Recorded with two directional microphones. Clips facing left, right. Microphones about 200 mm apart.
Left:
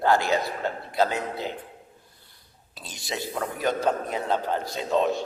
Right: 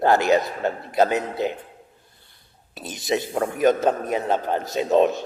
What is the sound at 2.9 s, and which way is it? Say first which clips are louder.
A man's voice: right 8 dB; 20° right (ahead or behind).